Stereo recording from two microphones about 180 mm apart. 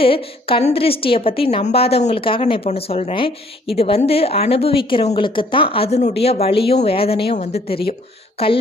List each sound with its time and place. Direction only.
0.0 s a woman's voice: 30° left (ahead or behind)